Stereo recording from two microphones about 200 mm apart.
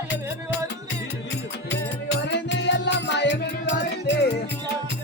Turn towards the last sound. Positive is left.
turn(degrees=60)  # may be behind; listen again after turning